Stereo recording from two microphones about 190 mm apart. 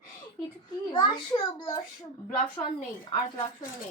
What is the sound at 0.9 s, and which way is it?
Speech, 20° left (ahead or behind).